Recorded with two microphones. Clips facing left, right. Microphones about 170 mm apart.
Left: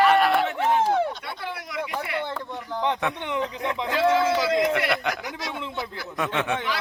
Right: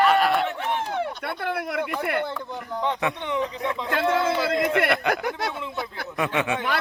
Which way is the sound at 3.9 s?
55° right (ahead or behind).